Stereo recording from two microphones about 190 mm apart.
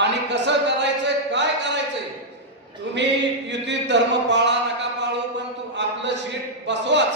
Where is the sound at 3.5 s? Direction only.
65° right (ahead or behind).